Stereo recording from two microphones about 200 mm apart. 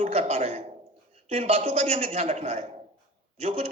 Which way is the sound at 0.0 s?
30° right (ahead or behind).